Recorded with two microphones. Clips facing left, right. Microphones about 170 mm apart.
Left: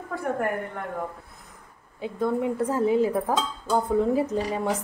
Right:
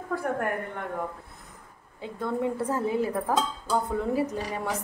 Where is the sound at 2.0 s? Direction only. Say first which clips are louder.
Left 4 dB; 15° left (ahead or behind).